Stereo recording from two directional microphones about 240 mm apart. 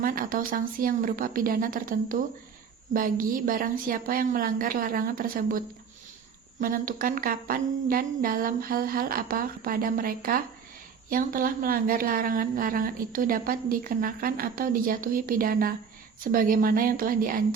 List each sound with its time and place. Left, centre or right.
0.0 s a woman's voice: right